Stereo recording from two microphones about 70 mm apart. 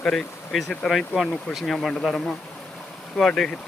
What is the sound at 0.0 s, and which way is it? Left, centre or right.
Speech, centre.